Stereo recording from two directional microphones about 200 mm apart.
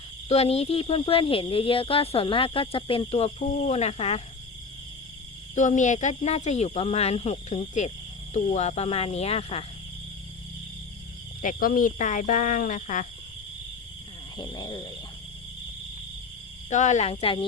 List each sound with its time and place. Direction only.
0.3 s speech: 30° left (ahead or behind)
5.5 s speech: 40° left (ahead or behind)
11.4 s speech: 45° left (ahead or behind)
14.3 s speech: 20° left (ahead or behind)
16.6 s speech: 35° left (ahead or behind)